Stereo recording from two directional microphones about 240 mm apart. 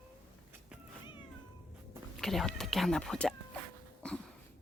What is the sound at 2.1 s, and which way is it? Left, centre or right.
Speech, centre.